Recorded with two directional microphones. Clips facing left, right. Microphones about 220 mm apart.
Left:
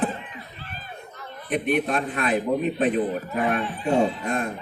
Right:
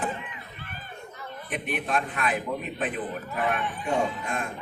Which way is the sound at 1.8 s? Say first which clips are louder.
Left 4 dB; 35° left (ahead or behind).